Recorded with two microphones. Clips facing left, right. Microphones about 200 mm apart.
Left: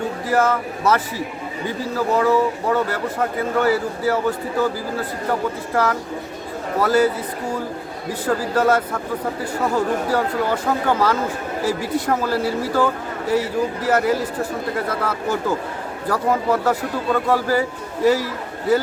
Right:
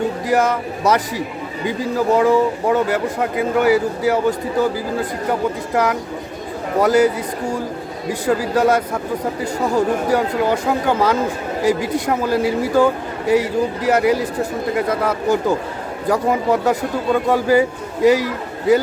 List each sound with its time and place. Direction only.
0.3 s speech: 15° right (ahead or behind)
2.1 s speech: 15° right (ahead or behind)
8.2 s speech: 10° right (ahead or behind)